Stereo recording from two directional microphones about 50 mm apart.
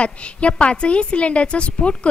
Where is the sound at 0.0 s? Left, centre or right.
Left.